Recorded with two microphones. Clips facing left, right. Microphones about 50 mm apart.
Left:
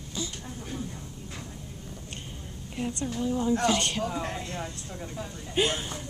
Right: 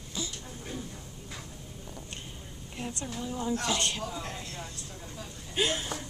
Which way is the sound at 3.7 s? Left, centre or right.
Left.